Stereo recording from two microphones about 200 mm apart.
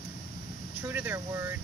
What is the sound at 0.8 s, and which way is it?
Speech, 10° right (ahead or behind).